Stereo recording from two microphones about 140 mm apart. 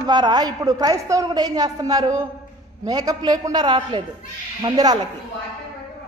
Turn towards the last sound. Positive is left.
turn(degrees=-30)  # may be behind; listen again after turning